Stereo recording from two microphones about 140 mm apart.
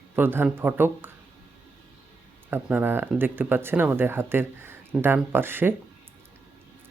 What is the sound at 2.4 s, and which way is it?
Speech, 15° right (ahead or behind).